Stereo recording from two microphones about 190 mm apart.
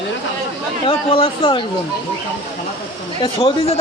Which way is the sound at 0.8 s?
30° left (ahead or behind).